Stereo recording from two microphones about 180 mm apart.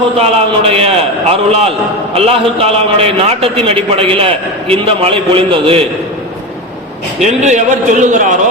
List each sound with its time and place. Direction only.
0.2 s a man's voice: 35° right (ahead or behind)
7.2 s a man's voice: 40° right (ahead or behind)